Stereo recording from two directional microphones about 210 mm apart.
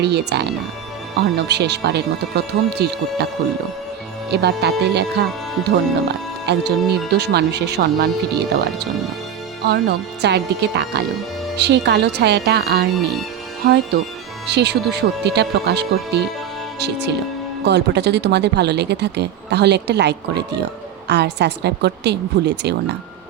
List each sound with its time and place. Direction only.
0.0 s speech: 50° right (ahead or behind)
4.3 s speech: 50° right (ahead or behind)